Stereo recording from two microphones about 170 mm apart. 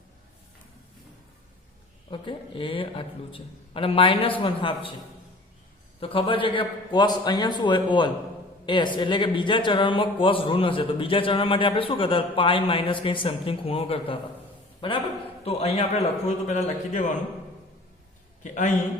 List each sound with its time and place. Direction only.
2.0 s speech: 30° left (ahead or behind)
6.0 s a man's voice: 30° left (ahead or behind)
18.4 s a man's voice: 45° left (ahead or behind)